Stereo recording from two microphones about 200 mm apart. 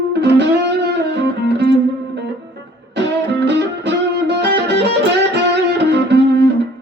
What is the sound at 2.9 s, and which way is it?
Music, 60° right (ahead or behind).